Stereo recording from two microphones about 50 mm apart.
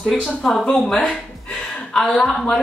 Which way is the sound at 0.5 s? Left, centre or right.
Centre.